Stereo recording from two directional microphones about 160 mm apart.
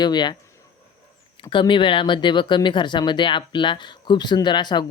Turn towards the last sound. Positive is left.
turn(degrees=25)  # may be behind; listen again after turning